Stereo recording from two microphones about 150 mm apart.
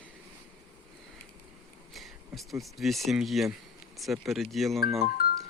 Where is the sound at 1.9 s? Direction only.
Centre (ahead or behind).